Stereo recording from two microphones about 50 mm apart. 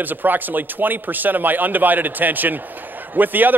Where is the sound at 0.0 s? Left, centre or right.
Right.